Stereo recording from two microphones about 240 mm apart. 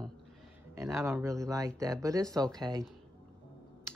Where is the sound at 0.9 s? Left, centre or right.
Centre.